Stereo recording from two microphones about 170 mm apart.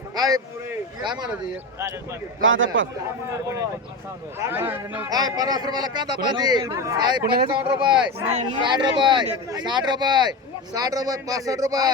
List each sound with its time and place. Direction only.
0.2 s speech: 20° right (ahead or behind)
3.2 s a man's voice: 15° right (ahead or behind)
7.9 s speech: 5° right (ahead or behind)
8.3 s speech: 45° right (ahead or behind)
8.6 s a man's voice: 25° right (ahead or behind)